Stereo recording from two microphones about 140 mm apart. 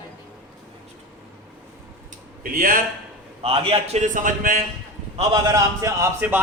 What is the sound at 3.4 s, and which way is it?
Speech, 40° right (ahead or behind).